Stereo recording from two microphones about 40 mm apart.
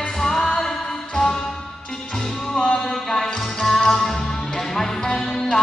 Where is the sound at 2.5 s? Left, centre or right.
Left.